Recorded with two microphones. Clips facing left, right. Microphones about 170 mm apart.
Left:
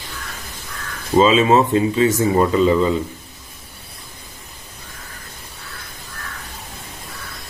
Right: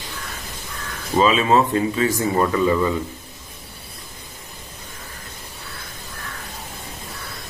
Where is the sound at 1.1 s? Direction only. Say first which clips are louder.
Left 3 dB; 25° left (ahead or behind).